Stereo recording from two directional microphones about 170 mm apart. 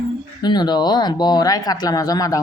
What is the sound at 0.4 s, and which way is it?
Speech, 25° left (ahead or behind).